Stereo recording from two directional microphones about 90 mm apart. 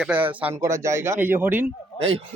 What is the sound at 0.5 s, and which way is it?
A man's voice, 35° right (ahead or behind).